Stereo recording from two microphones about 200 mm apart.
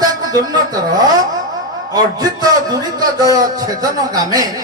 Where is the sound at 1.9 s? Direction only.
20° right (ahead or behind).